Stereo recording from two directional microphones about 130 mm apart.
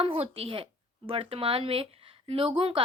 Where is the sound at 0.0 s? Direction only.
45° right (ahead or behind).